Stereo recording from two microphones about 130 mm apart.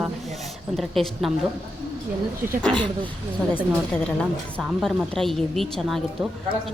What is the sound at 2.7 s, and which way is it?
Speech, 40° right (ahead or behind).